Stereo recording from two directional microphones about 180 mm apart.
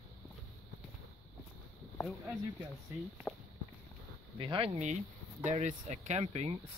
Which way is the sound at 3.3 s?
5° left (ahead or behind).